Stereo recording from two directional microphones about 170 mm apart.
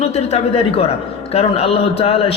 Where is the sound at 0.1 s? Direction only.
40° left (ahead or behind).